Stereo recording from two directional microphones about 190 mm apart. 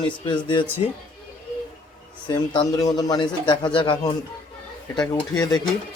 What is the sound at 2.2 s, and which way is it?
Speech, 25° left (ahead or behind).